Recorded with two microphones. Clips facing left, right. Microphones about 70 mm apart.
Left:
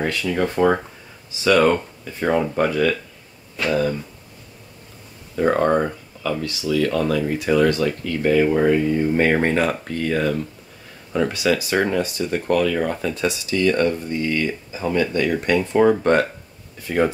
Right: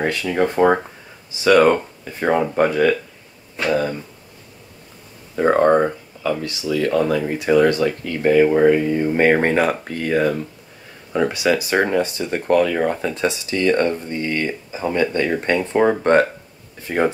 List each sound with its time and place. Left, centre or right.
0.2 s speech: right
5.3 s speech: right